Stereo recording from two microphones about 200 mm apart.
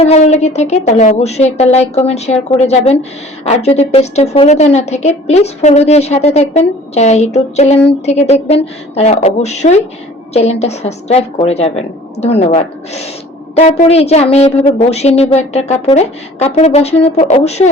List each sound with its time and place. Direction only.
0.0 s a woman's voice: 35° left (ahead or behind)